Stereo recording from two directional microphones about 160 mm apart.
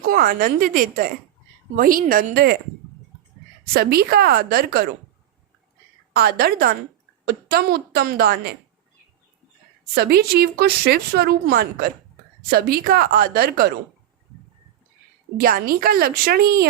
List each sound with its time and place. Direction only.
0.1 s a woman's voice: 65° right (ahead or behind)
3.7 s a woman's voice: 75° right (ahead or behind)
6.1 s a woman's voice: 75° right (ahead or behind)
9.9 s a woman's voice: 75° right (ahead or behind)
15.4 s a woman's voice: 65° right (ahead or behind)